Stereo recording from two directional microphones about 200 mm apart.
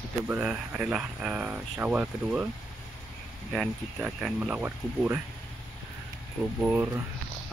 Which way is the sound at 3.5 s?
5° right (ahead or behind).